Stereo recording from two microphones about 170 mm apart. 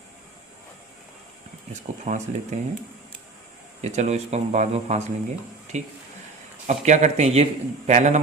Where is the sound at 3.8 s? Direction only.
40° right (ahead or behind).